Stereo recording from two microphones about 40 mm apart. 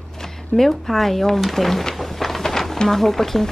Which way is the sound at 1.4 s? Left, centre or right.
Centre.